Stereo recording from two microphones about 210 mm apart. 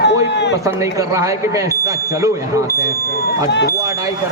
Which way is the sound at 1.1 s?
15° right (ahead or behind).